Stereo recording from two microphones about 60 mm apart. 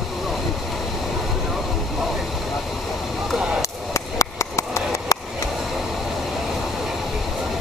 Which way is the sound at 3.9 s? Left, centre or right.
Left.